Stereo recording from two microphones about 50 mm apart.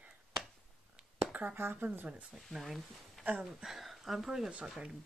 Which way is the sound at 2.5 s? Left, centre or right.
Centre.